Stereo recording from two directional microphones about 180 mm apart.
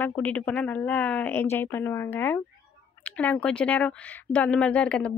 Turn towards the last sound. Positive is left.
turn(degrees=5)  # may be behind; listen again after turning